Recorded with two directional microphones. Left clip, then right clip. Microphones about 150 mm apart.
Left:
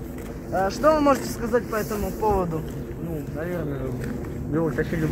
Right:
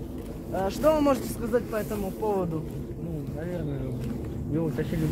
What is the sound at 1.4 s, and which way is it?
Speech, 15° left (ahead or behind).